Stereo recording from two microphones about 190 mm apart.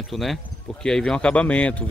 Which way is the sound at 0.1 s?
Centre (ahead or behind).